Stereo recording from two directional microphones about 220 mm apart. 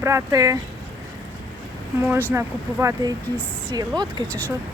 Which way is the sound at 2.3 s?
10° right (ahead or behind).